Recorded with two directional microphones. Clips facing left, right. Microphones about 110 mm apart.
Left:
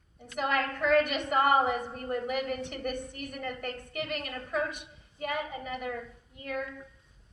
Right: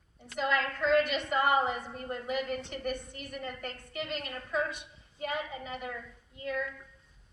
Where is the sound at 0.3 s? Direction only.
50° left (ahead or behind).